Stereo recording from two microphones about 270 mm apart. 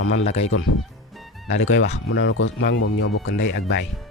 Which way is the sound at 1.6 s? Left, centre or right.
Left.